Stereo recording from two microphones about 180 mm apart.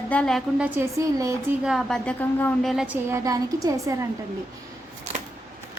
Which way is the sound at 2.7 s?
5° right (ahead or behind).